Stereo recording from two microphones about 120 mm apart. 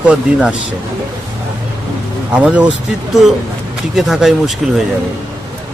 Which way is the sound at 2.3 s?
10° right (ahead or behind).